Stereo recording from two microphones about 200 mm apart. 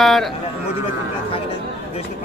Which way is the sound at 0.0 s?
Centre (ahead or behind).